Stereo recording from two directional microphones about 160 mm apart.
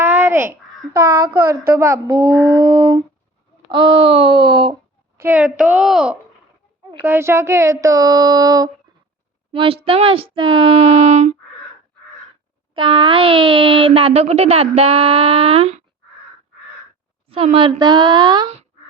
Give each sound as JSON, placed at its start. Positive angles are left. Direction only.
{"t": 0.0, "sound": "a child's voice", "side_deg": -15}
{"t": 5.2, "sound": "a woman's voice", "side_deg": -10}
{"t": 7.0, "sound": "speech", "side_deg": -15}
{"t": 9.5, "sound": "speech", "side_deg": -35}
{"t": 12.7, "sound": "speech", "side_deg": -30}
{"t": 17.2, "sound": "speech", "side_deg": -35}